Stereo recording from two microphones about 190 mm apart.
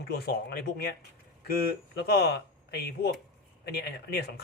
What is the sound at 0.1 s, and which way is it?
Speech, 55° left (ahead or behind).